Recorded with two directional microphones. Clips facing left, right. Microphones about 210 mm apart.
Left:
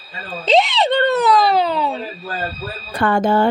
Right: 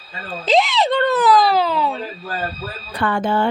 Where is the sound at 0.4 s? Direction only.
Centre (ahead or behind).